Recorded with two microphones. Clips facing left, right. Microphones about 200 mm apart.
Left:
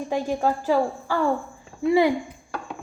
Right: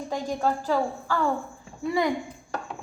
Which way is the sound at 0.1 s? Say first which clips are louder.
Left 3 dB; 10° left (ahead or behind).